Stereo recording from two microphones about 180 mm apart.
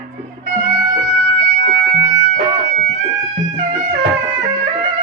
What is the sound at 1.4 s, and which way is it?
Siren, 55° right (ahead or behind).